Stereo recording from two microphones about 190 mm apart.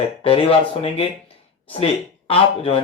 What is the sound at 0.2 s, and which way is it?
Speech, 30° left (ahead or behind).